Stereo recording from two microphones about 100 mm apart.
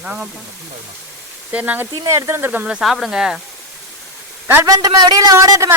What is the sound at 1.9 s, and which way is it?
Speech, 30° right (ahead or behind).